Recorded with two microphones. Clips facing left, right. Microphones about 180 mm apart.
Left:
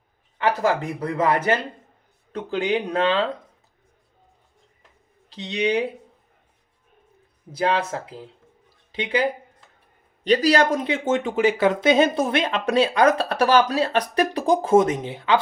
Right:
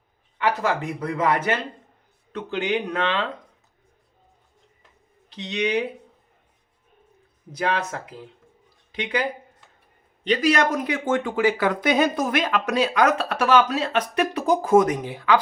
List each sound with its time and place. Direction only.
0.3 s speech: 35° left (ahead or behind)
5.3 s speech: 30° left (ahead or behind)
7.6 s speech: 30° left (ahead or behind)